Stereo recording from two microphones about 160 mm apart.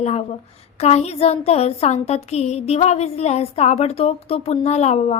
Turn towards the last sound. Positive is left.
turn(degrees=45)  # may be behind; listen again after turning